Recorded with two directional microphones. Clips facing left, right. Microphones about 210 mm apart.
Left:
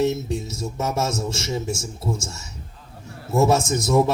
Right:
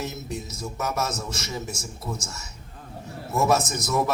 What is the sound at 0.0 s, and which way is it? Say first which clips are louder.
A man's voice: left 10 dB; 30° left (ahead or behind).